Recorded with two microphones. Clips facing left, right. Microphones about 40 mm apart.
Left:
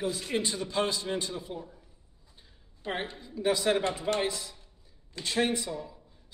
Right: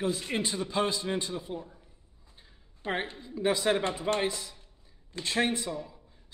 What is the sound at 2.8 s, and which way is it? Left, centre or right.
Speech, right.